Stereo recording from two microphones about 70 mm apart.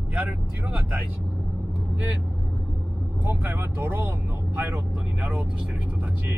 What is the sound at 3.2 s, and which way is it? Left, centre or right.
Speech, right.